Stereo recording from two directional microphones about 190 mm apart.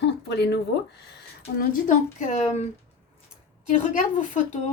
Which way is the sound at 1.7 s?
40° left (ahead or behind).